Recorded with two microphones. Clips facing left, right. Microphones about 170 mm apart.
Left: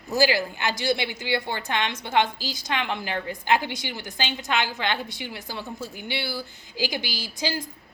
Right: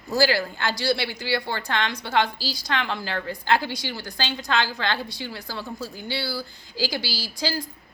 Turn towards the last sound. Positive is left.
turn(degrees=20)  # may be behind; listen again after turning